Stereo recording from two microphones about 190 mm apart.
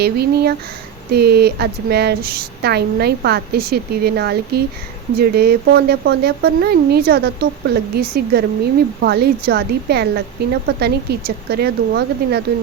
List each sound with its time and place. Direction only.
0.0 s a woman's voice: 55° right (ahead or behind)